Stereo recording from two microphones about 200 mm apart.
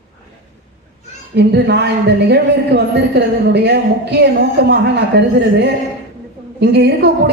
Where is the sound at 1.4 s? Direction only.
55° right (ahead or behind).